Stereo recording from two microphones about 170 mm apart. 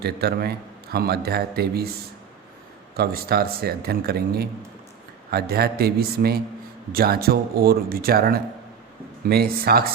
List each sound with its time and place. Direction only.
0.0 s a man's voice: 70° right (ahead or behind)
2.9 s a man's voice: 65° right (ahead or behind)